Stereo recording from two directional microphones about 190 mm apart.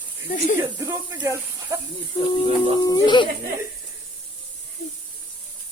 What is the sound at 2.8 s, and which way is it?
Speech, 20° left (ahead or behind).